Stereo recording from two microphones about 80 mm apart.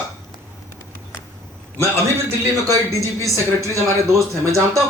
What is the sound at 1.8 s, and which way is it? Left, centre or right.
A man's voice, right.